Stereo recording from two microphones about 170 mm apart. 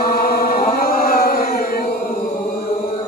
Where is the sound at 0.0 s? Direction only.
65° left (ahead or behind).